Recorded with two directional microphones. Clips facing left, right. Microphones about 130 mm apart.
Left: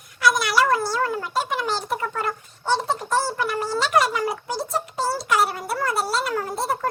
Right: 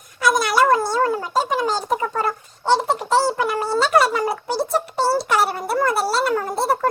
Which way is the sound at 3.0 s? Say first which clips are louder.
Right 6 dB; 75° right (ahead or behind).